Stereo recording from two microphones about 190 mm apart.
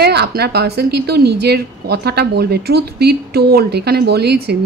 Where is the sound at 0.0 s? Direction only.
55° right (ahead or behind).